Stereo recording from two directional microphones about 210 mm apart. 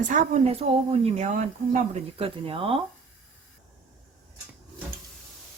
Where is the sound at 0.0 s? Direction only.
40° right (ahead or behind).